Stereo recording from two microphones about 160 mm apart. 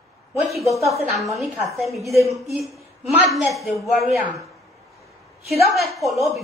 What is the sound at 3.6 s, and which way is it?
Speech, centre (ahead or behind).